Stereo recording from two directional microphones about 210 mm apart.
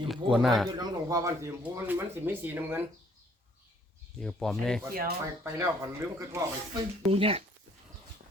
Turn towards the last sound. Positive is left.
turn(degrees=-25)  # may be behind; listen again after turning